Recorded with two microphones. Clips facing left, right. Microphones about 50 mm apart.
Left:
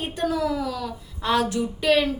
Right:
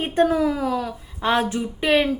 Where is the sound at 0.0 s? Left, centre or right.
Right.